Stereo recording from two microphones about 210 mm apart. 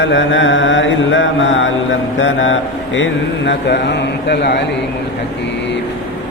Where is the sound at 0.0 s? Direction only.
60° left (ahead or behind).